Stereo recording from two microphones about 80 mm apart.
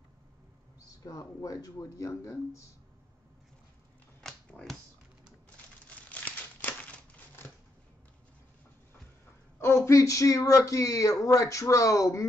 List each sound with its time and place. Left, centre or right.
0.8 s speech: left
2.0 s speech: left
4.5 s speech: centre
5.9 s crumpling: centre
9.6 s speech: left